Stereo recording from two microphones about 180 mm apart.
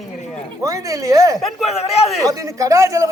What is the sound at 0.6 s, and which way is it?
Speech, 20° right (ahead or behind).